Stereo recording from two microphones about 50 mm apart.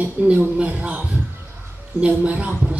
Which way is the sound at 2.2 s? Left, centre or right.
Right.